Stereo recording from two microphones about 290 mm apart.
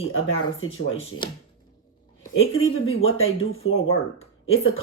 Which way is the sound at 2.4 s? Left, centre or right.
Left.